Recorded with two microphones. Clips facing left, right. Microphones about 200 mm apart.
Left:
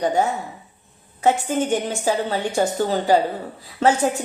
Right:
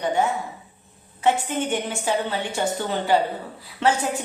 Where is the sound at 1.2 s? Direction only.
40° left (ahead or behind).